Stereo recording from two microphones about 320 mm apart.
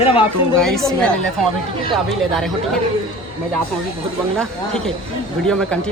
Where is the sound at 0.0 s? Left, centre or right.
Centre.